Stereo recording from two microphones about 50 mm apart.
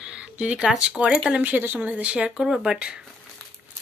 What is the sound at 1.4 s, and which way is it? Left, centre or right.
Speech, right.